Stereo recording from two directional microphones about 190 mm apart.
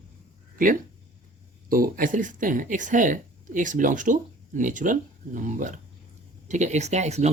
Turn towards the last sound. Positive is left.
turn(degrees=-35)  # may be behind; listen again after turning